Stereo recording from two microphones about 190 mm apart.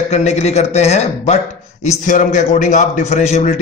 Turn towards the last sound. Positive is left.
turn(degrees=35)  # may be behind; listen again after turning